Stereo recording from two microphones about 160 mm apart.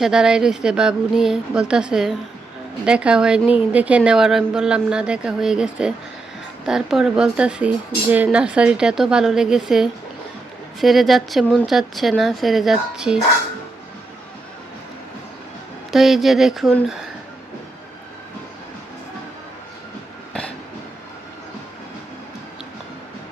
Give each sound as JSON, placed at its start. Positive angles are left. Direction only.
{"t": 0.0, "sound": "a woman's voice", "side_deg": -5}
{"t": 15.9, "sound": "a woman's voice", "side_deg": 0}